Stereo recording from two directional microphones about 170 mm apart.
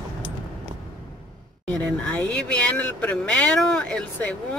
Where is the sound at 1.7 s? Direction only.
10° left (ahead or behind).